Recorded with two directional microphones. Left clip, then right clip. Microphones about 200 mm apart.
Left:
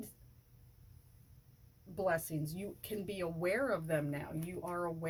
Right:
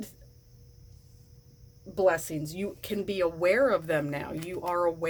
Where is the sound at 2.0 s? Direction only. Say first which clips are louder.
Right 9 dB; 40° right (ahead or behind).